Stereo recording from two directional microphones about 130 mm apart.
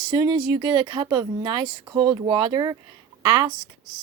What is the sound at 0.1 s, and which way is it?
Speech, 35° right (ahead or behind).